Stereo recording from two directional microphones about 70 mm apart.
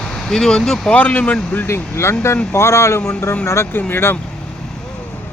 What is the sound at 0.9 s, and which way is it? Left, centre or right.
Speech, left.